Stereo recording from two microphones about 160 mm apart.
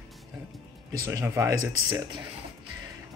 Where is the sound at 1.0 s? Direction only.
15° right (ahead or behind).